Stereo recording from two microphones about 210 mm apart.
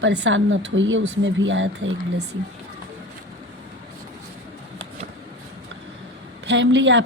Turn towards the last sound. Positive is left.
turn(degrees=-60)  # may be behind; listen again after turning